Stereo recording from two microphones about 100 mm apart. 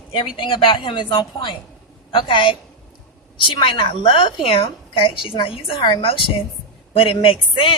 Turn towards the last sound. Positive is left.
turn(degrees=55)  # may be behind; listen again after turning